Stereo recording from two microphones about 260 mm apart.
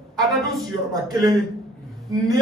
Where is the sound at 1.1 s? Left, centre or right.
Centre.